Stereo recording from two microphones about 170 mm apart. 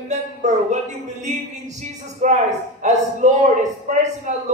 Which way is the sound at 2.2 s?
45° right (ahead or behind).